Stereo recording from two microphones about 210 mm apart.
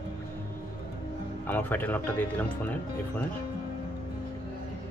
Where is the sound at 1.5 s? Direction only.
10° left (ahead or behind).